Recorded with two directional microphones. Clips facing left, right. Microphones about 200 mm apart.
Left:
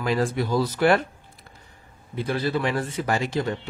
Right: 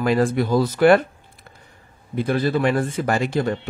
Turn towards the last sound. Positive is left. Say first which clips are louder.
# right 4 dB
turn(degrees=-55)  # may be behind; listen again after turning